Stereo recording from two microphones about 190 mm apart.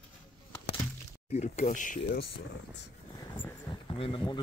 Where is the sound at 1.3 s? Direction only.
35° left (ahead or behind).